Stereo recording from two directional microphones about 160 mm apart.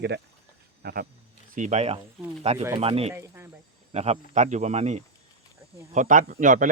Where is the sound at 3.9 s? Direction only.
40° right (ahead or behind).